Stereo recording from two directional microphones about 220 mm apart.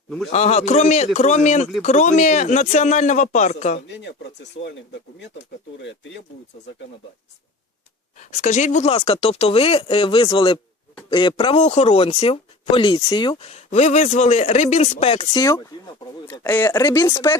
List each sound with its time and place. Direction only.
0.3 s speech: 30° left (ahead or behind)
3.8 s speech: 55° left (ahead or behind)
8.4 s speech: 35° left (ahead or behind); by 17.3 s 15° left (ahead or behind)